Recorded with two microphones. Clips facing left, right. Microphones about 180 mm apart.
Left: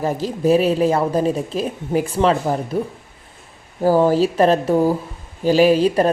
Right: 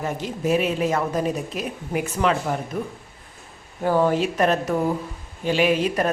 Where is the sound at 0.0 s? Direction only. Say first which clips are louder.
Left 6 dB; 35° left (ahead or behind).